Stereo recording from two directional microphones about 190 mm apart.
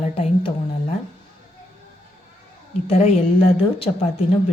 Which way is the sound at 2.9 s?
35° left (ahead or behind).